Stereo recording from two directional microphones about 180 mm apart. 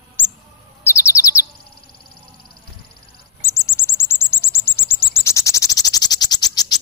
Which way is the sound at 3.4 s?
15° left (ahead or behind).